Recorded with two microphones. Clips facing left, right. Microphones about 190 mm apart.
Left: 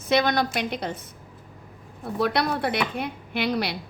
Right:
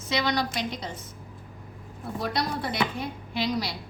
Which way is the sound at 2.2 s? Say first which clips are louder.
Left 6 dB; 65° left (ahead or behind).